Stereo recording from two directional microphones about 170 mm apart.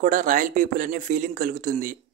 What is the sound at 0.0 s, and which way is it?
Speech, 50° right (ahead or behind).